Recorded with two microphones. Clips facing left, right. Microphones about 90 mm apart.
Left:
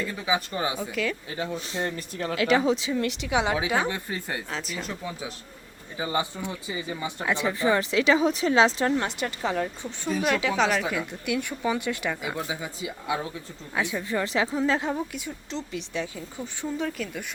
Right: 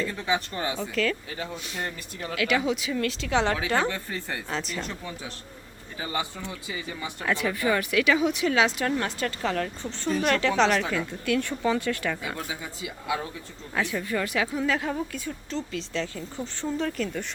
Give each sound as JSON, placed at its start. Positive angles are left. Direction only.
{"t": 0.0, "sound": "speech", "side_deg": 5}
{"t": 1.5, "sound": "speech", "side_deg": 30}
{"t": 4.4, "sound": "a woman's voice", "side_deg": 0}
{"t": 6.0, "sound": "a woman's voice", "side_deg": 20}